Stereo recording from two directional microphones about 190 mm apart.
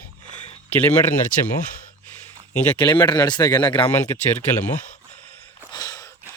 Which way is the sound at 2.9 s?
25° left (ahead or behind).